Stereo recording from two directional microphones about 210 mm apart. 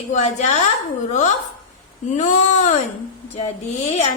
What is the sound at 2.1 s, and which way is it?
Speech, 35° left (ahead or behind).